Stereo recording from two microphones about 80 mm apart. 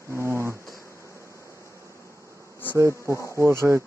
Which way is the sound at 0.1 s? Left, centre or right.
Right.